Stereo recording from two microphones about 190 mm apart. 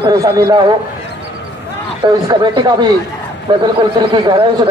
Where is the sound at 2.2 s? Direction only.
20° right (ahead or behind).